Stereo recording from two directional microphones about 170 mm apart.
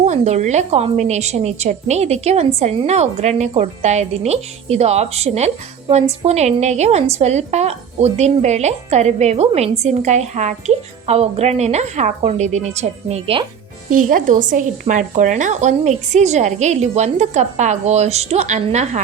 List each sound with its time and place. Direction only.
0.0 s a woman's voice: 40° right (ahead or behind)
13.9 s speech: 50° right (ahead or behind)